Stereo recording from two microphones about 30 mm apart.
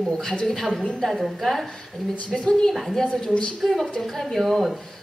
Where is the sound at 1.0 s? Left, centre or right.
Centre.